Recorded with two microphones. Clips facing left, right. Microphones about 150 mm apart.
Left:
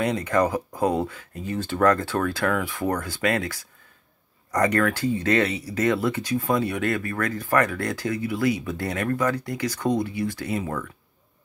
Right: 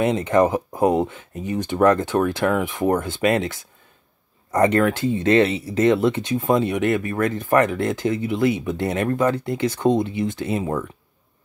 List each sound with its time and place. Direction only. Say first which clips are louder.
0.0 s speech: right 5 dB; 25° right (ahead or behind)